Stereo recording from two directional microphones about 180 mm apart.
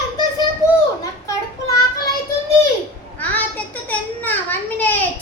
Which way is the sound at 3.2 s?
10° left (ahead or behind).